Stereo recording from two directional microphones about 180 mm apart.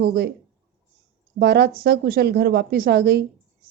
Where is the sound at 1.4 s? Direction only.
65° right (ahead or behind).